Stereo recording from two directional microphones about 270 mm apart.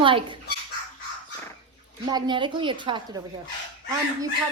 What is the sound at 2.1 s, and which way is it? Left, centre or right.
Speech, centre.